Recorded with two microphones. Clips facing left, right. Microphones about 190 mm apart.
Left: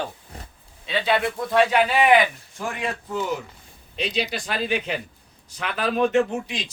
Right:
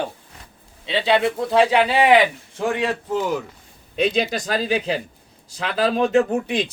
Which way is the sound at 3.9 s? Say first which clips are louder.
Right 6 dB; 50° right (ahead or behind).